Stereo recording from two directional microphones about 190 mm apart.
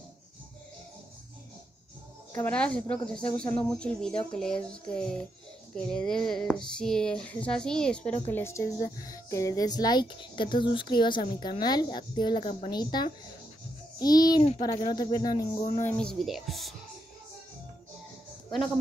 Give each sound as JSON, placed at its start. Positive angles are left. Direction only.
{"t": 2.3, "sound": "a woman's voice", "side_deg": 5}
{"t": 15.8, "sound": "speech", "side_deg": 5}